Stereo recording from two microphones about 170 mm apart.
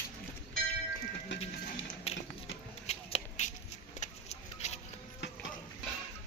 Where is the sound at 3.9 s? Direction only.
40° left (ahead or behind).